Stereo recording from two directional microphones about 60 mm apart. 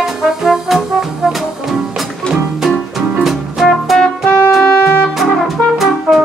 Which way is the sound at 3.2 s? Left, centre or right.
Centre.